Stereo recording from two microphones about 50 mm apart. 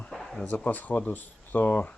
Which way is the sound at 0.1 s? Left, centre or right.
Centre.